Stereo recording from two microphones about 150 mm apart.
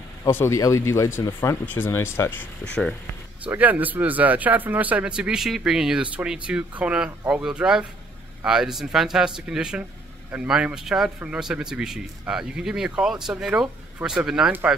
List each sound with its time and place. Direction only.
0.2 s speech: 20° left (ahead or behind)
3.4 s a man's voice: 10° right (ahead or behind)